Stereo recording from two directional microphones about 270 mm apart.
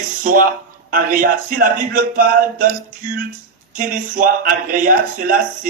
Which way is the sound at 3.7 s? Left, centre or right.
Right.